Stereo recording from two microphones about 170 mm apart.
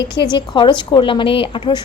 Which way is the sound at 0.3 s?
30° left (ahead or behind).